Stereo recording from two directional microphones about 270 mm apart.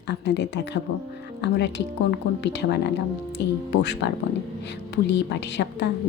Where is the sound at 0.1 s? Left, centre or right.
Left.